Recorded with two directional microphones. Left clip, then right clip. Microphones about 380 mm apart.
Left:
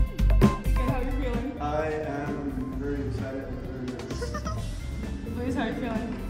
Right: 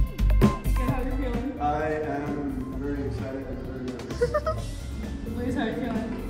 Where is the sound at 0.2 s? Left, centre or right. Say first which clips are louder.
Even; centre.